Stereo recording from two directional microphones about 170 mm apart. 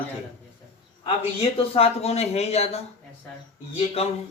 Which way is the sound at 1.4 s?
35° left (ahead or behind).